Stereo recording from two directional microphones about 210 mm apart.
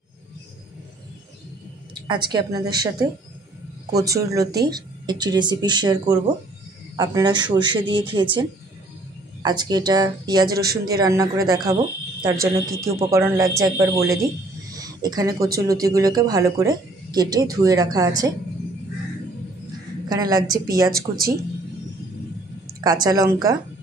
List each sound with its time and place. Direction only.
2.2 s speech: 20° right (ahead or behind)
10.4 s speech: 45° right (ahead or behind)
11.0 s speech: 15° right (ahead or behind)
14.7 s a sound: 15° right (ahead or behind)
15.6 s speech: 15° right (ahead or behind)
20.1 s a woman's voice: 20° right (ahead or behind)
20.9 s speech: 45° right (ahead or behind)
23.0 s speech: 20° right (ahead or behind)